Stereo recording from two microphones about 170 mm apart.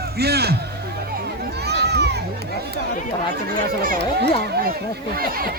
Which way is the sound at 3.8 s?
60° right (ahead or behind).